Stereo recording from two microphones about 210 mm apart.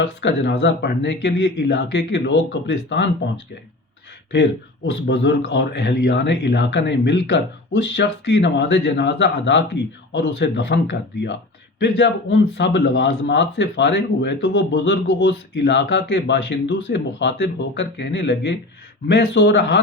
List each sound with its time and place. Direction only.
0.2 s speech: 55° left (ahead or behind)
4.9 s speech: 60° left (ahead or behind)